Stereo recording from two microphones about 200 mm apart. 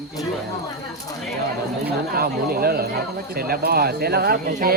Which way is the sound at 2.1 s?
50° right (ahead or behind).